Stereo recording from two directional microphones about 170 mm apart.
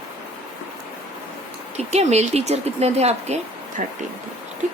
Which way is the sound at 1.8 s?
40° right (ahead or behind).